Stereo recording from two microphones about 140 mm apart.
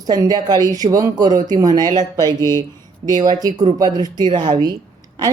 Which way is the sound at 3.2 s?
30° right (ahead or behind).